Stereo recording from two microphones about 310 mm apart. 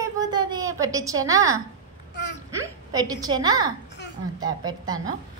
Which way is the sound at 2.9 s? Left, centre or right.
Centre.